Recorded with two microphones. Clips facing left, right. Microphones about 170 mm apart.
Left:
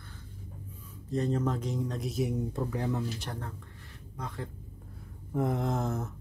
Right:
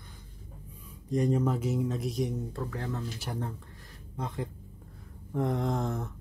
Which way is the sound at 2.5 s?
15° left (ahead or behind).